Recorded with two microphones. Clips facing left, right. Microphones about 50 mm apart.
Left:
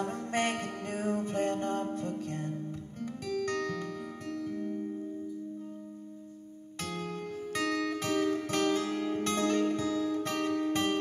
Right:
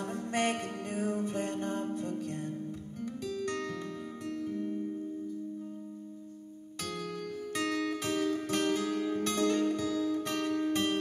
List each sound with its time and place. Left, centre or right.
0.0 s music: left
7.5 s music: left